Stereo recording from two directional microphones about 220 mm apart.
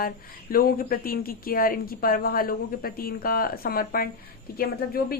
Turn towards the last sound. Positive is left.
turn(degrees=45)  # may be behind; listen again after turning